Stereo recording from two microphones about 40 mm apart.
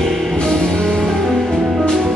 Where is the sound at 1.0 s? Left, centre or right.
Centre.